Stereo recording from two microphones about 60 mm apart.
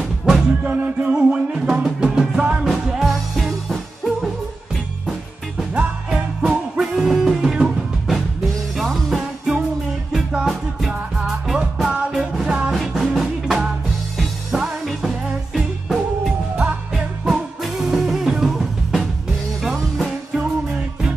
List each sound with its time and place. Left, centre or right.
0.2 s music: centre
0.7 s music: right
1.1 s music: centre
2.6 s music: centre
6.8 s music: centre
12.7 s music: centre